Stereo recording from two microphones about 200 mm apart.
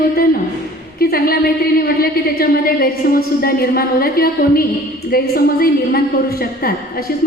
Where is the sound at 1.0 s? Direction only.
50° left (ahead or behind).